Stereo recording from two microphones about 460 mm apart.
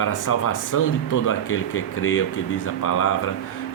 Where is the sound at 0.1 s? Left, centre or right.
Left.